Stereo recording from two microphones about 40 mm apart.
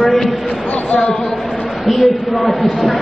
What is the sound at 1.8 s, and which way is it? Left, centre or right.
A man's voice, centre.